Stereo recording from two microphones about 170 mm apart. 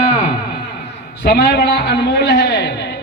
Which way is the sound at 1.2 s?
70° left (ahead or behind).